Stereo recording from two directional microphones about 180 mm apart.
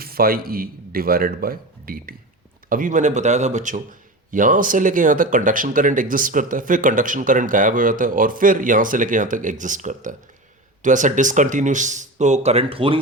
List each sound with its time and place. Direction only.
0.0 s a man's voice: 55° right (ahead or behind); by 13.0 s 30° right (ahead or behind)